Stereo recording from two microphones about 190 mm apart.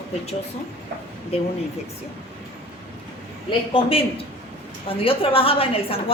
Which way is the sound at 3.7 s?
30° left (ahead or behind).